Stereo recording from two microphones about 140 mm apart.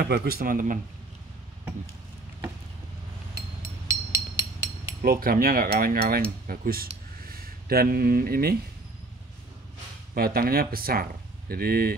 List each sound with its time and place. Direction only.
0.0 s speech: 90° right
3.3 s a sound: 20° right (ahead or behind)
5.0 s speech: 90° right
10.1 s speech: 90° right